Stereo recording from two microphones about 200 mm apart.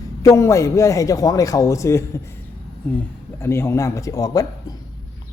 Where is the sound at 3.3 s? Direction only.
10° left (ahead or behind).